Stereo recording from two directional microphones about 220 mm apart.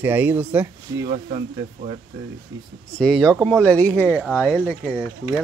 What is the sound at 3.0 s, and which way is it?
Speech, centre (ahead or behind).